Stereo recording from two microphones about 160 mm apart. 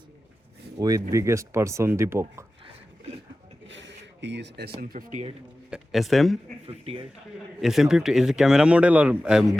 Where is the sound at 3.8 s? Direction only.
90° right.